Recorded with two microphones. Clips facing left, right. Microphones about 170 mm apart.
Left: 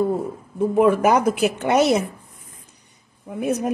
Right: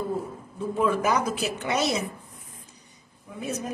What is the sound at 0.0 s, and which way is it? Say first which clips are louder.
Speech: left 8 dB; 55° left (ahead or behind).